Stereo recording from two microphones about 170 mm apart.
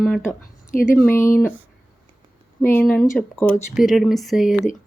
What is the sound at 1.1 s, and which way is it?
Speech, 15° left (ahead or behind).